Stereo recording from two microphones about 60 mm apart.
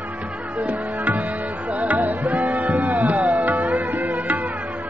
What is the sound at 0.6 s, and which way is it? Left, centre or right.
Music, right.